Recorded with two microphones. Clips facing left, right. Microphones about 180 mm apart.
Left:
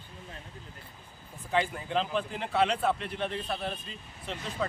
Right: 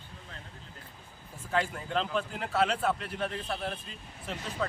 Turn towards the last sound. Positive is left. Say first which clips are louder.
# even
turn(degrees=0)  # may be behind; listen again after turning